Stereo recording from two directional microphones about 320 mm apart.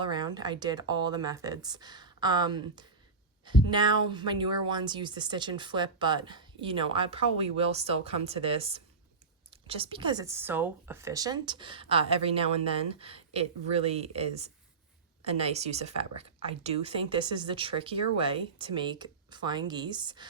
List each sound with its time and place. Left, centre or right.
0.0 s speech: centre